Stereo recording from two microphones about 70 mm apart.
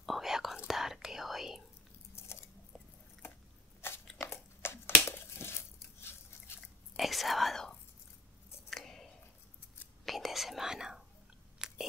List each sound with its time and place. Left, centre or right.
0.0 s whispering: centre
3.8 s crunch: left
4.2 s crumpling: left
7.0 s whispering: centre
8.6 s chewing: centre
10.0 s whispering: centre
11.6 s chewing: centre